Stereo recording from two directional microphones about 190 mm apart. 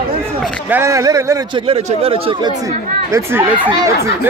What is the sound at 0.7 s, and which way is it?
A man's voice, 15° right (ahead or behind).